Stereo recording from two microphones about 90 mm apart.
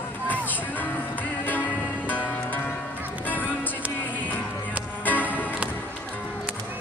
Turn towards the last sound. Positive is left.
turn(degrees=-15)  # may be behind; listen again after turning